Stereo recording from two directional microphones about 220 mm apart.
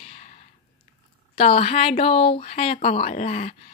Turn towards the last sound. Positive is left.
turn(degrees=30)  # may be behind; listen again after turning